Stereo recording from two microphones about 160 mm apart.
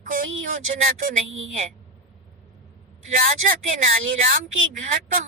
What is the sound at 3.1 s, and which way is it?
Speech, 60° right (ahead or behind).